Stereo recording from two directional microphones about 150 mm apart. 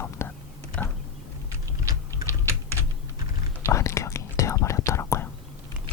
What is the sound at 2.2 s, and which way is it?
Typing, 20° right (ahead or behind).